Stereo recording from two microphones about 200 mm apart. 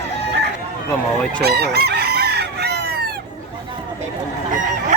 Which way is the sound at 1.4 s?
50° right (ahead or behind).